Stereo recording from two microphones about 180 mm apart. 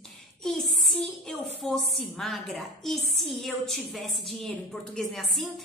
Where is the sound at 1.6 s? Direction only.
Centre (ahead or behind).